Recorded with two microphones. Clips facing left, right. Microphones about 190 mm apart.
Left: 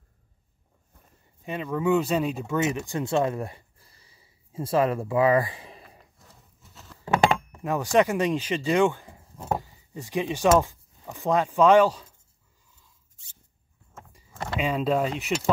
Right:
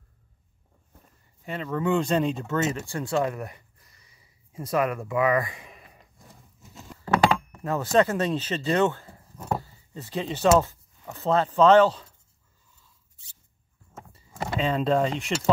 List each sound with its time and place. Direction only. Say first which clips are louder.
1.4 s speech: left 1 dB; 15° left (ahead or behind); by 6.0 s 30° left (ahead or behind)
6.7 s patter: right 5 dB; 15° right (ahead or behind)
7.5 s speech: even; 15° left (ahead or behind)
14.6 s speech: right 1 dB; 10° left (ahead or behind)